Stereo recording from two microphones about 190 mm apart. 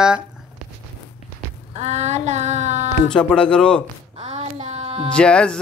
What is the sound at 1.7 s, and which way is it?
Child singing, 35° right (ahead or behind).